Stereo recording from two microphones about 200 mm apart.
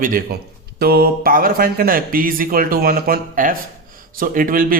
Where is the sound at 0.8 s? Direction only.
50° right (ahead or behind).